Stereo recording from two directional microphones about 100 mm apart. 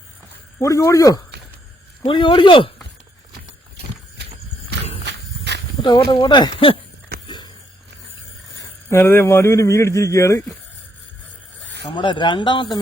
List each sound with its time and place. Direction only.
0.6 s speech: 35° left (ahead or behind)
2.0 s speech: 55° left (ahead or behind)
5.8 s speech: 50° left (ahead or behind)
7.3 s a sound: 50° left (ahead or behind)
8.9 s speech: 25° left (ahead or behind)
11.9 s speech: 55° left (ahead or behind)